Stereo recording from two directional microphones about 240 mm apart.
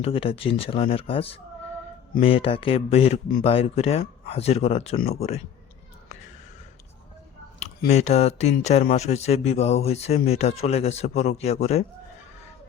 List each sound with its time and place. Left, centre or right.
0.0 s speech: left
7.6 s speech: left